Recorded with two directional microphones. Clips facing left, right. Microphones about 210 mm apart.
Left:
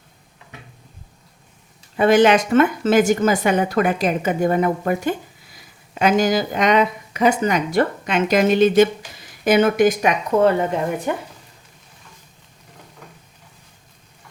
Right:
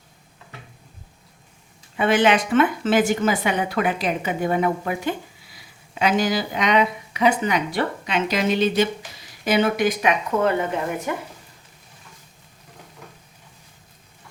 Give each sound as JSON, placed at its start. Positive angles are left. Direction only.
{"t": 2.0, "sound": "a woman's voice", "side_deg": 40}